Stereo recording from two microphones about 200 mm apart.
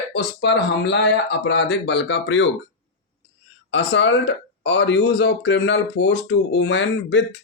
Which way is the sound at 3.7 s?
65° left (ahead or behind).